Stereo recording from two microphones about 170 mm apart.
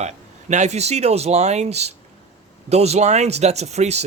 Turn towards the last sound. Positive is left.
turn(degrees=-40)  # may be behind; listen again after turning